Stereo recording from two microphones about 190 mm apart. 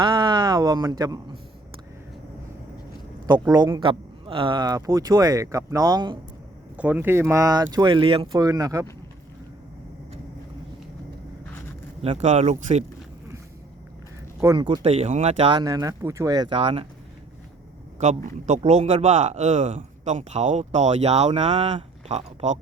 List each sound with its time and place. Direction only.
0.0 s speech: 25° right (ahead or behind)
3.4 s speech: 15° right (ahead or behind)
6.7 s speech: 10° right (ahead or behind)
12.0 s speech: 35° right (ahead or behind)
14.4 s speech: 25° right (ahead or behind)
18.0 s speech: 40° right (ahead or behind)